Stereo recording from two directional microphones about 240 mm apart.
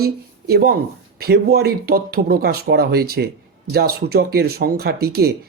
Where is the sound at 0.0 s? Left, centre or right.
Right.